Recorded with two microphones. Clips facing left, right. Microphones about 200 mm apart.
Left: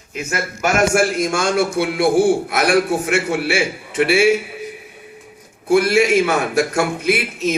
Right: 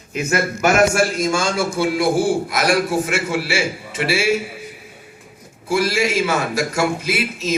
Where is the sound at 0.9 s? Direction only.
55° left (ahead or behind).